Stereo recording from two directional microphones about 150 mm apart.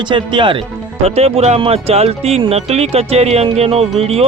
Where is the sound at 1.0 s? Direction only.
45° right (ahead or behind).